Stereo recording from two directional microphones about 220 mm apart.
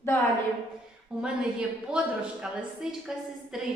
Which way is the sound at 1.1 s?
Centre (ahead or behind).